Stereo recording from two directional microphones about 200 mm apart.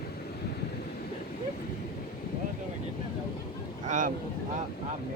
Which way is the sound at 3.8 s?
40° right (ahead or behind).